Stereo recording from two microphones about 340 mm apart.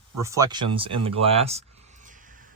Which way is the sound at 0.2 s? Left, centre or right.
Centre.